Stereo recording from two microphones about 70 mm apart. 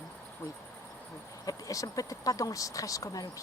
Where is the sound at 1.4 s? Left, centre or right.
Left.